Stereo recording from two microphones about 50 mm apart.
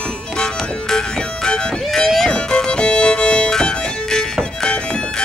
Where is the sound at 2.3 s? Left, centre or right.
Centre.